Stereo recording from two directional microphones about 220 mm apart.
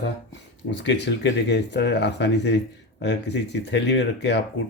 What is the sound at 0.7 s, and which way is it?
Speech, 50° left (ahead or behind).